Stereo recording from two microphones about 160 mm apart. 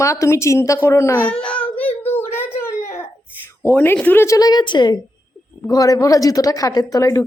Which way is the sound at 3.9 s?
10° left (ahead or behind).